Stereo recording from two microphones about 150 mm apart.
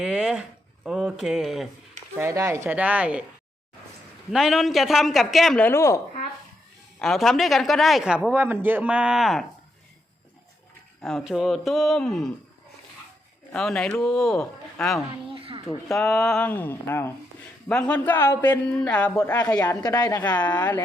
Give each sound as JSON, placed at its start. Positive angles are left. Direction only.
{"t": 0.0, "sound": "a sound", "side_deg": -5}
{"t": 0.9, "sound": "speech", "side_deg": -5}
{"t": 2.1, "sound": "speech", "side_deg": -20}
{"t": 4.3, "sound": "speech", "side_deg": 0}
{"t": 5.6, "sound": "a woman's voice", "side_deg": 20}
{"t": 7.0, "sound": "speech", "side_deg": 0}
{"t": 11.0, "sound": "speech", "side_deg": 0}
{"t": 13.5, "sound": "speech", "side_deg": 5}
{"t": 15.3, "sound": "a sound", "side_deg": -35}
{"t": 15.9, "sound": "a man's voice", "side_deg": 0}
{"t": 19.1, "sound": "a woman's voice", "side_deg": 20}
{"t": 20.6, "sound": "a man's voice", "side_deg": 10}